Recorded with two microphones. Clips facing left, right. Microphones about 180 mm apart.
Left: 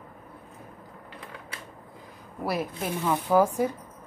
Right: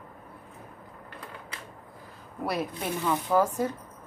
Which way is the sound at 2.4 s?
Centre (ahead or behind).